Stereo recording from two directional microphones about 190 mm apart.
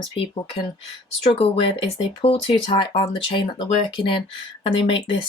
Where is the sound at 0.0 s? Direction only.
30° left (ahead or behind).